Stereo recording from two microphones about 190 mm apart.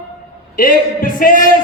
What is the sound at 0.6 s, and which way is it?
Speech, 45° left (ahead or behind).